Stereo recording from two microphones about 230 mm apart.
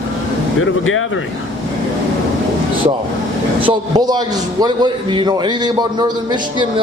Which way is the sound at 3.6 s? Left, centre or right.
Centre.